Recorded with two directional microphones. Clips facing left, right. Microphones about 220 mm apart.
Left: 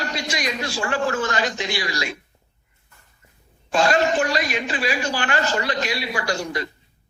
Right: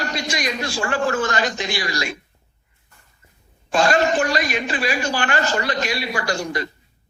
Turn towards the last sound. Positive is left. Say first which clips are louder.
# right 1 dB
turn(degrees=-45)  # may be behind; listen again after turning